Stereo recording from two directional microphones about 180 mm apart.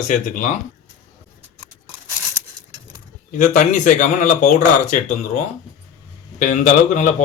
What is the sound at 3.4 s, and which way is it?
Speech, 45° left (ahead or behind).